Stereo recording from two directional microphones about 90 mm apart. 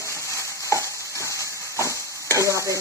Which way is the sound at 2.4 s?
35° right (ahead or behind).